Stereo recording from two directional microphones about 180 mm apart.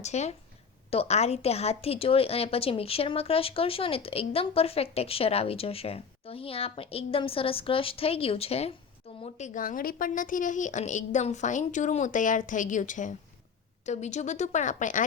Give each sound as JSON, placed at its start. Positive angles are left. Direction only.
{"t": 0.0, "sound": "a woman's voice", "side_deg": 40}